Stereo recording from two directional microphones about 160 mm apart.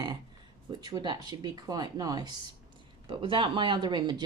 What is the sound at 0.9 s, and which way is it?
Speech, 25° right (ahead or behind).